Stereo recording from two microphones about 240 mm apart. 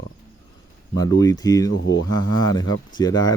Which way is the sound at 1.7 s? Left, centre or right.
Left.